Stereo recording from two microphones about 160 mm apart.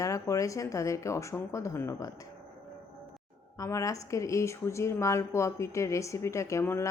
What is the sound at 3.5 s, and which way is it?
Speech, 20° left (ahead or behind).